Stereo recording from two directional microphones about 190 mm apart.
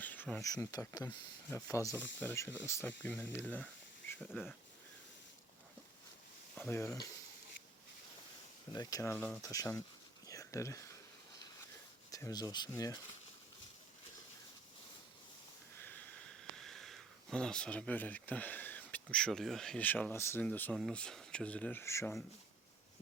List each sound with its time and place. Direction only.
0.0 s a sound: 10° left (ahead or behind)
0.4 s speech: 20° left (ahead or behind); by 4.5 s centre (ahead or behind)
6.6 s speech: 15° left (ahead or behind)
8.7 s speech: 20° left (ahead or behind)
10.2 s a sound: 15° left (ahead or behind)
12.1 s speech: 20° left (ahead or behind)
15.8 s speech: 10° left (ahead or behind)